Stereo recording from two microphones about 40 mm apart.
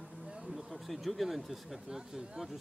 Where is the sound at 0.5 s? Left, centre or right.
Centre.